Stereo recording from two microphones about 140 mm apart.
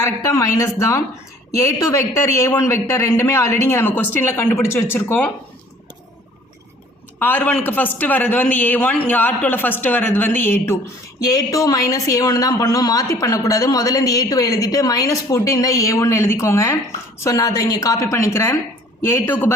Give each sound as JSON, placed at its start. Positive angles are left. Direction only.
{"t": 0.0, "sound": "a man's voice", "side_deg": 20}
{"t": 7.2, "sound": "a man's voice", "side_deg": 10}